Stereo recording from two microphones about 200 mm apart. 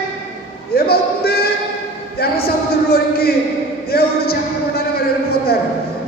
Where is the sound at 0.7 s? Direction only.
50° left (ahead or behind).